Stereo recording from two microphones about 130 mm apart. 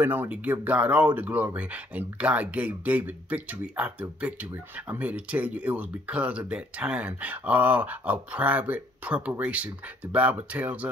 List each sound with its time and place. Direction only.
0.0 s speech: 15° right (ahead or behind)